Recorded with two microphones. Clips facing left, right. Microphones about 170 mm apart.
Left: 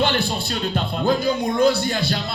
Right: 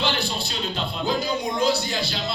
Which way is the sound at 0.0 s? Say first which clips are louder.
Left 5 dB; 55° left (ahead or behind).